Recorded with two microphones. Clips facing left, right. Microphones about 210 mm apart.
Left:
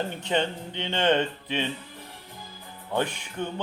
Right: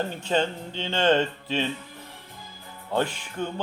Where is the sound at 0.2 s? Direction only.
20° left (ahead or behind).